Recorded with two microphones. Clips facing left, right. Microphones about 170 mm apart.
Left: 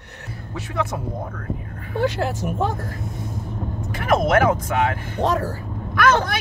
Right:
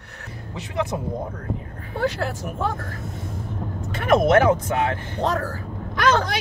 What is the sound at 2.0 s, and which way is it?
Speech, 20° left (ahead or behind).